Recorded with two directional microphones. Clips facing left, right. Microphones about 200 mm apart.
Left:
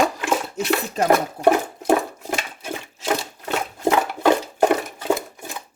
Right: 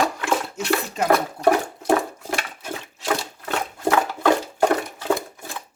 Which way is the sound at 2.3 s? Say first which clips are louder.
Left 1 dB; 20° left (ahead or behind).